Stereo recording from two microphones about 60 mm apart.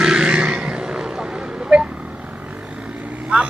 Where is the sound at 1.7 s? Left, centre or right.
Centre.